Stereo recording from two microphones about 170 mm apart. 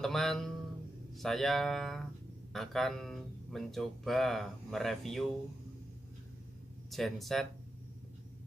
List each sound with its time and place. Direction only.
0.0 s a sound: centre (ahead or behind)
1.1 s speech: centre (ahead or behind)
6.9 s speech: centre (ahead or behind)